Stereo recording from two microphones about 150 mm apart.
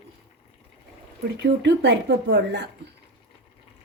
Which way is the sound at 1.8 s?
90° right.